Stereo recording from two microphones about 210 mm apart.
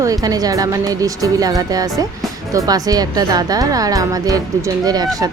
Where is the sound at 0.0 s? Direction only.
15° right (ahead or behind).